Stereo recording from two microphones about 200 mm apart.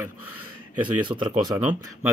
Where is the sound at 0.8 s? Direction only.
25° right (ahead or behind).